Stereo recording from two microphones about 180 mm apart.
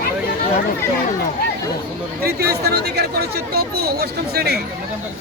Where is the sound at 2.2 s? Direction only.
60° right (ahead or behind).